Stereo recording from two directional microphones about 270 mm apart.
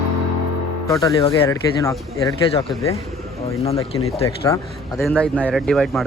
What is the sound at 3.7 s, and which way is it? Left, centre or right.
Speech, left.